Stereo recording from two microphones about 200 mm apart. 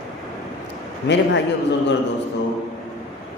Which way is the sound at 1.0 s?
60° left (ahead or behind).